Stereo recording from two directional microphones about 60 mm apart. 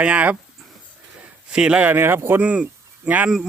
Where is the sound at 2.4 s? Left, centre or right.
Right.